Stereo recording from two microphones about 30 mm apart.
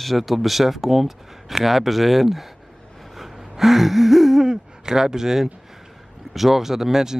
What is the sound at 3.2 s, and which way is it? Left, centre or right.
Gasp, centre.